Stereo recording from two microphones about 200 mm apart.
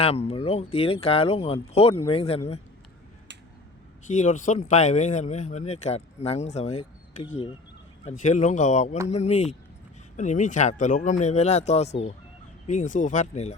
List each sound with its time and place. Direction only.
0.0 s speech: 30° left (ahead or behind)
4.0 s speech: 40° left (ahead or behind)
8.0 s speech: 35° left (ahead or behind)